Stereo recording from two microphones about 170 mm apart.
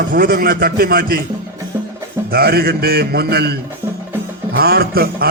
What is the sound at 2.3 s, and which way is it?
A man's voice, 65° right (ahead or behind).